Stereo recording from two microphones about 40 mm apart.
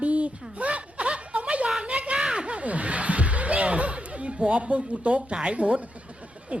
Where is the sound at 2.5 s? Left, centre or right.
Right.